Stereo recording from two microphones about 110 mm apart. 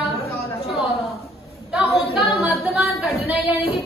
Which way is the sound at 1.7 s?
5° right (ahead or behind).